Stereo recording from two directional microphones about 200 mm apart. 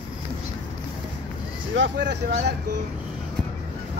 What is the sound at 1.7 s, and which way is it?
Speech, 65° right (ahead or behind).